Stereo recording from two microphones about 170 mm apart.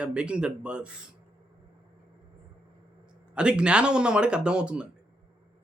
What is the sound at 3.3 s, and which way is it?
Speech, 5° right (ahead or behind).